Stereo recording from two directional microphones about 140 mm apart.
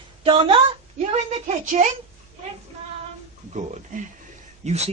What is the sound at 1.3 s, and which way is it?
Speech, 60° right (ahead or behind).